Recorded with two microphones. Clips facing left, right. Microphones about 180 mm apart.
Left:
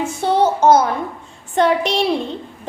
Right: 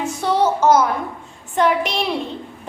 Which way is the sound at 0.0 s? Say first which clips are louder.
Left 2 dB; 30° left (ahead or behind).